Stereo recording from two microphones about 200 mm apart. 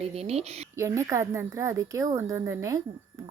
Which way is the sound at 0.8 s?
15° right (ahead or behind).